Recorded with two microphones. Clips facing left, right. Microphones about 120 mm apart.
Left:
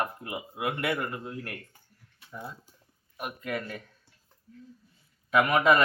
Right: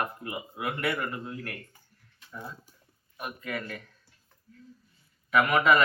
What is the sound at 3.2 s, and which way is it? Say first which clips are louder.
Speech: left 2 dB; 15° left (ahead or behind).